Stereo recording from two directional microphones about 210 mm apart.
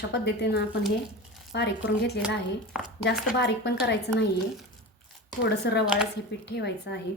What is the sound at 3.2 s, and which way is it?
Speech, 55° left (ahead or behind).